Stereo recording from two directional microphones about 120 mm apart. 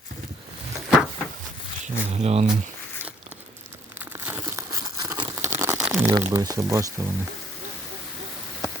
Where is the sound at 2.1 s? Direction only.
65° right (ahead or behind).